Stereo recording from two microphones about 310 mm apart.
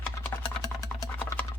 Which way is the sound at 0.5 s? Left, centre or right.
Centre.